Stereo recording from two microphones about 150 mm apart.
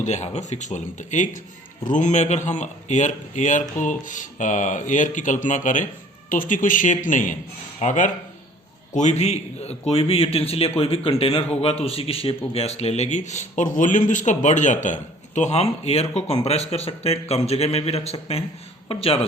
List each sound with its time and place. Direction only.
0.0 s a man's voice: 50° left (ahead or behind)